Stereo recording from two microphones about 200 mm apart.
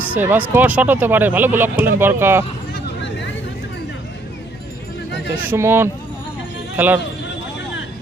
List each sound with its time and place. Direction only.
0.1 s speech: 10° right (ahead or behind)
3.0 s vehicle: 65° left (ahead or behind)
5.5 s speech: 10° right (ahead or behind)